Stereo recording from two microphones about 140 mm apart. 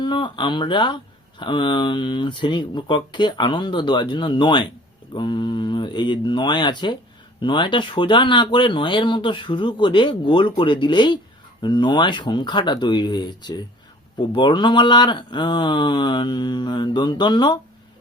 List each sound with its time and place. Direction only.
0.0 s speech: 35° left (ahead or behind)